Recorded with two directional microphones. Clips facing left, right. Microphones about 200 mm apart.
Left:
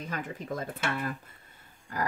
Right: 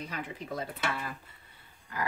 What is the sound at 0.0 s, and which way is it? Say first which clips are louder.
A woman's voice: left 2 dB; 45° left (ahead or behind).